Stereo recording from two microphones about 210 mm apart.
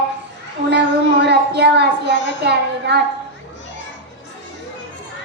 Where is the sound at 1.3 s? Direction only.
50° right (ahead or behind).